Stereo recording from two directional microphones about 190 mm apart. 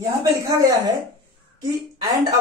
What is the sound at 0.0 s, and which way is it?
Speech, 15° right (ahead or behind).